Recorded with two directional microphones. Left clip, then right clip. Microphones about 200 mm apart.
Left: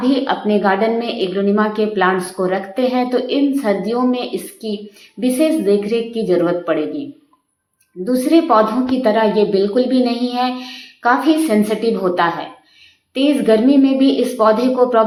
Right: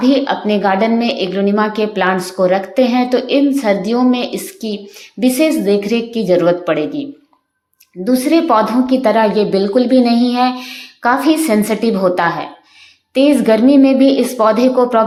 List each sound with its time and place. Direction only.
0.0 s a woman's voice: 35° right (ahead or behind)
8.0 s a woman's voice: 35° right (ahead or behind)